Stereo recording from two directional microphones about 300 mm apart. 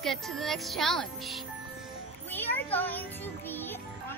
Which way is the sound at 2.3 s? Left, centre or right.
Centre.